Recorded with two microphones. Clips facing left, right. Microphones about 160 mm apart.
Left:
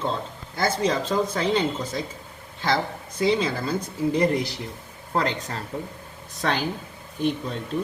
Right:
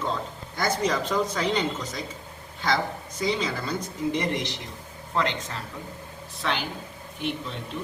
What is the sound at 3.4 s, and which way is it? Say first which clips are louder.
Speech: left 3 dB; 45° left (ahead or behind).